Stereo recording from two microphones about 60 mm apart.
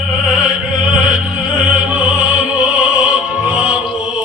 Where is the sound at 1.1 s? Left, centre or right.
Centre.